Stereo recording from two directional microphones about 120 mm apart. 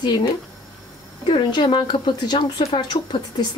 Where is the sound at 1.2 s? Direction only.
40° left (ahead or behind).